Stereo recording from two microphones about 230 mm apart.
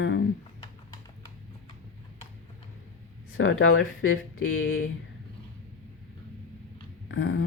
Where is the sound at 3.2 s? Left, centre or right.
Left.